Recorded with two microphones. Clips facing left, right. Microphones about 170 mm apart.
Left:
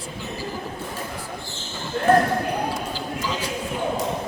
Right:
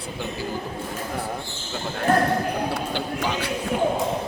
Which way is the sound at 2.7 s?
65° right (ahead or behind).